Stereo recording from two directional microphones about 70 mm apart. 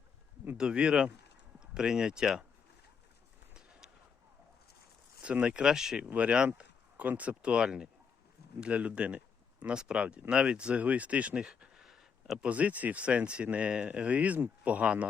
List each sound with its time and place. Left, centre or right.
0.5 s speech: centre
3.5 s basketball bounce: centre
5.2 s speech: centre
6.1 s speech: centre
11.4 s a sound: centre
12.5 s speech: right